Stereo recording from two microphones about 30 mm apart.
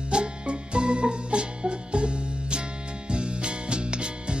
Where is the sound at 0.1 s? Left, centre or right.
Right.